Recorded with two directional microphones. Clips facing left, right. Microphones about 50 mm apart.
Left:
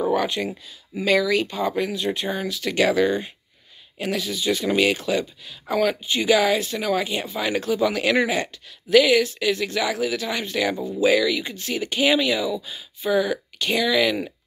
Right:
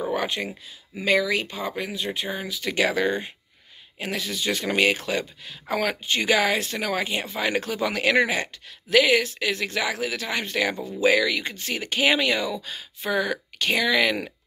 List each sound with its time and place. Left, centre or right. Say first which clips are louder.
0.1 s speech: left 4 dB; right
1.6 s speech: left 6 dB; centre
2.5 s speech: left 3 dB; right
8.9 s speech: left 3 dB; right